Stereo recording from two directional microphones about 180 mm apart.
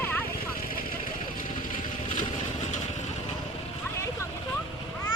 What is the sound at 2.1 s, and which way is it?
Vehicle, 45° left (ahead or behind).